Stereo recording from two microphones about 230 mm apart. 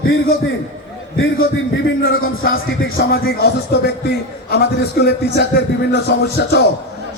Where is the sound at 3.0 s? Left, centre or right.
Left.